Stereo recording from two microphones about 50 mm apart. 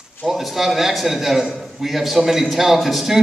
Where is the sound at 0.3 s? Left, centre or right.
Centre.